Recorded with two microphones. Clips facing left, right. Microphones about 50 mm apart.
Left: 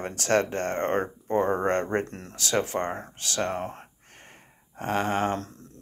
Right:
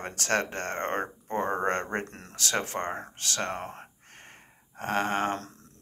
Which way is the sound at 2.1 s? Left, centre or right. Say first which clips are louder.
Left 1 dB; right.